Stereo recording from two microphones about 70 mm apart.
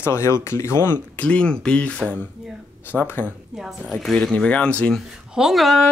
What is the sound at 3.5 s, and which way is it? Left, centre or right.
Speech, centre.